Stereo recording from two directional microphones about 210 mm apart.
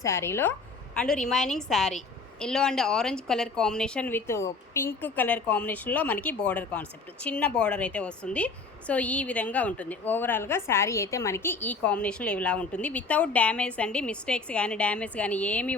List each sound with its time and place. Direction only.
0.0 s a woman's voice: 10° left (ahead or behind)